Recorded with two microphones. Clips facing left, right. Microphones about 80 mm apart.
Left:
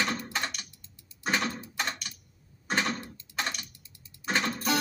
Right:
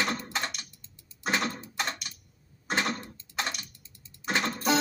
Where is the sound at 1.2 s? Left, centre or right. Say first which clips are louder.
Even; centre.